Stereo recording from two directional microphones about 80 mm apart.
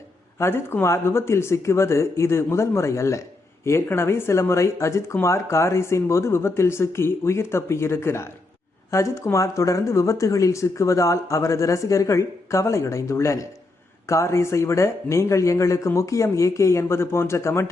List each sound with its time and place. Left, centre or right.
0.3 s speech: left